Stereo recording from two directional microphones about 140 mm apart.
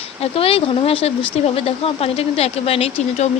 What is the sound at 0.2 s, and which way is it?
Speech, 40° left (ahead or behind).